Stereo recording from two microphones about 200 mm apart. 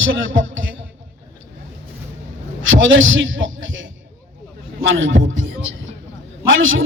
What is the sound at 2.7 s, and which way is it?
A man's voice, 70° right (ahead or behind).